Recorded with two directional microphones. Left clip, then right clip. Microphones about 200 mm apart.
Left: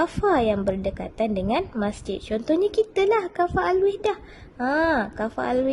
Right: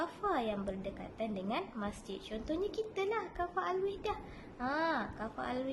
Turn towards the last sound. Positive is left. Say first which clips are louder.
# left 15 dB
turn(degrees=45)  # may be behind; listen again after turning